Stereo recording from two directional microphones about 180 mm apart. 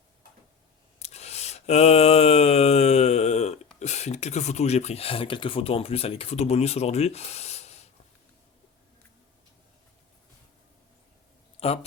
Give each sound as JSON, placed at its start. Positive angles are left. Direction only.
{"t": 0.9, "sound": "a sound", "side_deg": 35}
{"t": 3.8, "sound": "speech", "side_deg": 40}
{"t": 11.6, "sound": "a man's voice", "side_deg": 35}